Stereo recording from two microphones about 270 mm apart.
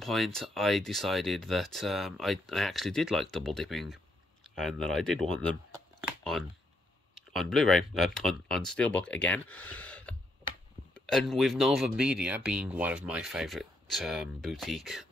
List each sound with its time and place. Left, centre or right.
0.0 s speech: centre
7.2 s speech: centre